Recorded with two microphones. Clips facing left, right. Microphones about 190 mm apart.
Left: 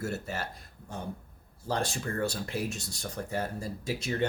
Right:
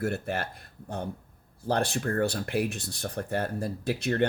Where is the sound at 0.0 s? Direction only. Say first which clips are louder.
Right 5 dB; 55° right (ahead or behind).